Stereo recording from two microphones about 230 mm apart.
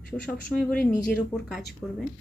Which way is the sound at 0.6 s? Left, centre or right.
Left.